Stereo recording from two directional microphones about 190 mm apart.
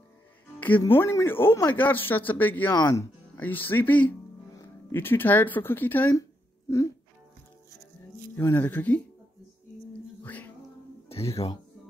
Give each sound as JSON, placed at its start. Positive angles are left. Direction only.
{"t": 0.6, "sound": "a man's voice", "side_deg": 10}
{"t": 8.4, "sound": "a man's voice", "side_deg": 10}
{"t": 10.2, "sound": "music", "side_deg": 10}
{"t": 11.1, "sound": "speech", "side_deg": 30}